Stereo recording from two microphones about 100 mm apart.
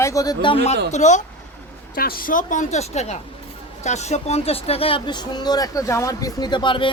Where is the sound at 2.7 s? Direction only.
90° left.